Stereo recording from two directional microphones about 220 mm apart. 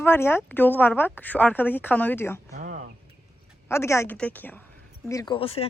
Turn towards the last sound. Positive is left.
turn(degrees=25)  # may be behind; listen again after turning